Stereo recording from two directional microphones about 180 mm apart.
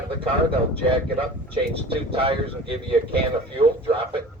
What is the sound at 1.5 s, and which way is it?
Speech, 30° right (ahead or behind).